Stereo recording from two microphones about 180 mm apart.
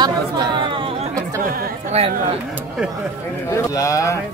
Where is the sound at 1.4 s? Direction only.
55° right (ahead or behind).